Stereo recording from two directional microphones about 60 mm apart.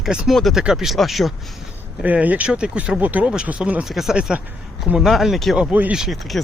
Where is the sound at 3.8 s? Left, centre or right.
Centre.